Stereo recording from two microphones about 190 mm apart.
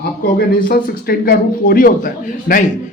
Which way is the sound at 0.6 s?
50° left (ahead or behind).